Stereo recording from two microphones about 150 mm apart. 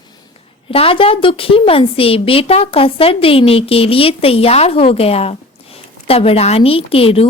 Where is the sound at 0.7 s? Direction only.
40° left (ahead or behind).